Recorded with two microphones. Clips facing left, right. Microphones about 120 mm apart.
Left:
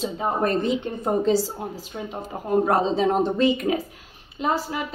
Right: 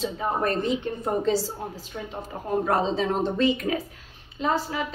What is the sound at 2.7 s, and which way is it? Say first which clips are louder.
A woman's voice: left 1 dB; 15° left (ahead or behind).